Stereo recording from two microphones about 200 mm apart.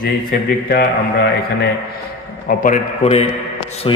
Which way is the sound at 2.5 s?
40° left (ahead or behind).